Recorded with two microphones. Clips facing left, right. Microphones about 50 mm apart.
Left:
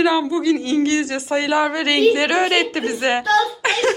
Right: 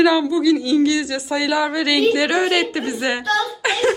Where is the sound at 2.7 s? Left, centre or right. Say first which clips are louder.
Left 2 dB; left.